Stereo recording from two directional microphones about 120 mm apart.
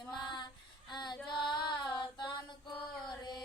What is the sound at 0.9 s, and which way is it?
Female singing, 35° left (ahead or behind).